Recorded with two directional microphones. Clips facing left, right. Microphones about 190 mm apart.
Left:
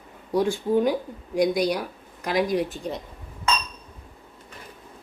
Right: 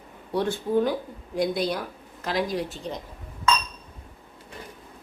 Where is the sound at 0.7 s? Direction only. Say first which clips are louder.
Even; 15° left (ahead or behind).